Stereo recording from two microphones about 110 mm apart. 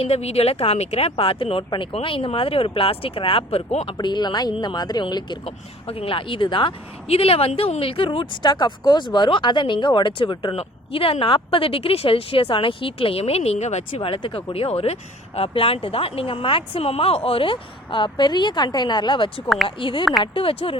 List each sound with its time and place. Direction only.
0.0 s speech: 70° left (ahead or behind)
3.9 s speech: 40° left (ahead or behind)
5.5 s speech: 60° left (ahead or behind); by 14.1 s 90° left
14.1 s speech: 45° left (ahead or behind)
14.5 s speech: 60° left (ahead or behind)